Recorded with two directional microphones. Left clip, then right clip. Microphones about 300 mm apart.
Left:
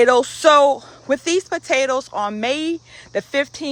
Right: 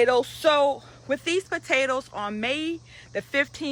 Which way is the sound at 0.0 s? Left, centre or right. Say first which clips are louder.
Left 7 dB; left.